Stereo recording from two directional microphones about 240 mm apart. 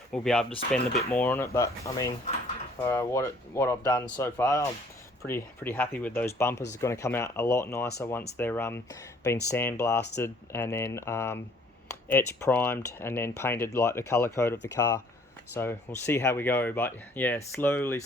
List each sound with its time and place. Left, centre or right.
0.1 s speech: centre